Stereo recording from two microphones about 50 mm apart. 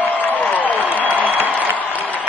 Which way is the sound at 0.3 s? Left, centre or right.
Left.